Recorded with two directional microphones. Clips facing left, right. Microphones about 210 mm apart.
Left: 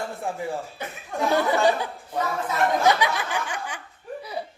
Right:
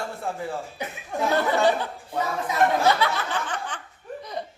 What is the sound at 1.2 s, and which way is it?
Speech, 10° left (ahead or behind).